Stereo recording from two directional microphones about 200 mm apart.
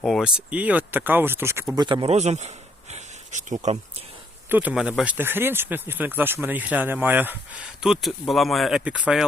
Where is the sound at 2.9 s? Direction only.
35° right (ahead or behind).